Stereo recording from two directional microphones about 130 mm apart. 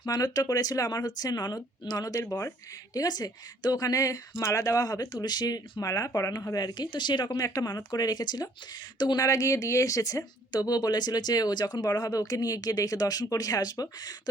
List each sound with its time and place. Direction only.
0.0 s speech: 30° left (ahead or behind)